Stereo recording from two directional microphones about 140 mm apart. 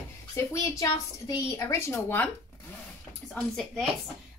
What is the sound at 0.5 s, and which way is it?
A woman's voice, 25° left (ahead or behind).